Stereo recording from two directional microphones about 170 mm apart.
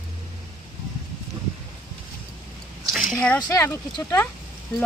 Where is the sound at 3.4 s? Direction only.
20° left (ahead or behind).